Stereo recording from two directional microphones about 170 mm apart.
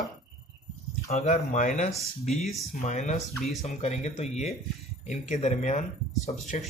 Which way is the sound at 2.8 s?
45° left (ahead or behind).